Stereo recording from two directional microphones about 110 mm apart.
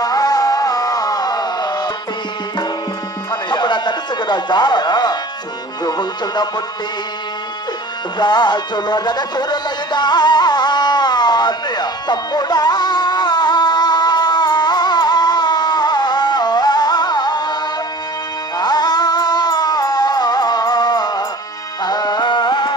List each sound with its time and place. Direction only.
0.0 s music: 35° left (ahead or behind)
3.4 s music: 45° left (ahead or behind)
8.2 s music: 40° left (ahead or behind)
18.6 s music: 40° left (ahead or behind)